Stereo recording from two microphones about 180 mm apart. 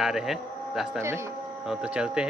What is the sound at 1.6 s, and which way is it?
Speech, 5° right (ahead or behind).